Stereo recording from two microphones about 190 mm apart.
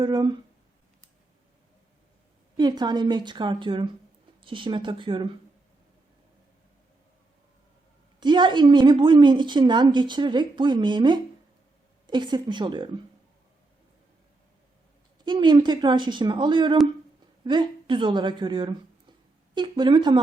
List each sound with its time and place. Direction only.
0.0 s a woman's voice: 20° right (ahead or behind)
2.6 s a woman's voice: 20° right (ahead or behind)
8.2 s a woman's voice: 25° right (ahead or behind)
15.2 s a woman's voice: 25° right (ahead or behind)